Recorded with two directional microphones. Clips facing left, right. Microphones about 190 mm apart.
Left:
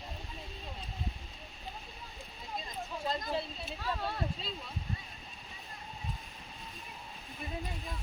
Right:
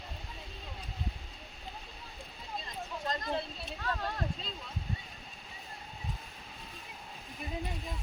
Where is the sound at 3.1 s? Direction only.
5° left (ahead or behind).